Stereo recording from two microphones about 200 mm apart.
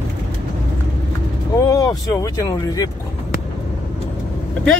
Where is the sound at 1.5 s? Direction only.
15° left (ahead or behind).